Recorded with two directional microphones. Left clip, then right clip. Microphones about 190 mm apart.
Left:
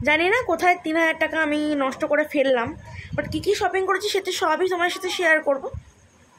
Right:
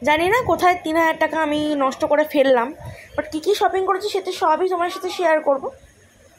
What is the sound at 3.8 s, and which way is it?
A woman's voice, centre (ahead or behind).